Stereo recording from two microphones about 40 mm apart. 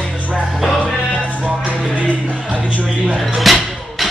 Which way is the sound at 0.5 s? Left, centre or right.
Centre.